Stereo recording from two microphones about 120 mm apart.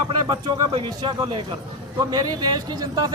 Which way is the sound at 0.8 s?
45° right (ahead or behind).